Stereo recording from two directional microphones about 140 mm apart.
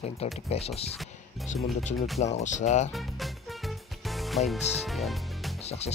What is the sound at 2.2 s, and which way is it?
Speech, 55° left (ahead or behind).